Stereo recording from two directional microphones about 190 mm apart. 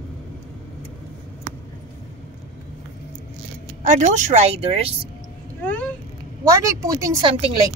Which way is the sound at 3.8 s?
40° right (ahead or behind).